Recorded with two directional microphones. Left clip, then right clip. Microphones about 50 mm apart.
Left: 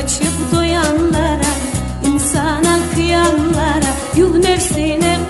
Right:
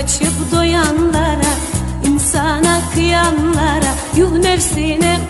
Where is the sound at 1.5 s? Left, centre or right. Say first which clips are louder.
Even; left.